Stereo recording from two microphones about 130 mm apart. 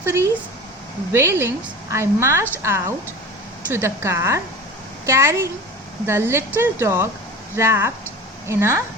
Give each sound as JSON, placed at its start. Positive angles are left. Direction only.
{"t": 0.0, "sound": "a woman's voice", "side_deg": -20}